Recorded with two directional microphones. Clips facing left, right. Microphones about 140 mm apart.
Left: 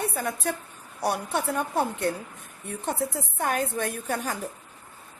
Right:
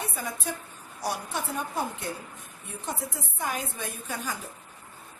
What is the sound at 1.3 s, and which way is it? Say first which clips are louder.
Speech: left 5 dB; 60° left (ahead or behind).